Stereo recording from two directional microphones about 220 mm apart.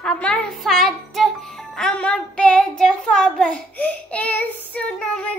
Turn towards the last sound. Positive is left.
turn(degrees=5)  # may be behind; listen again after turning